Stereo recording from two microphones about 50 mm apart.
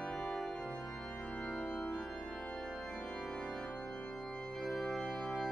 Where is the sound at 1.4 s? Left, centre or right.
Centre.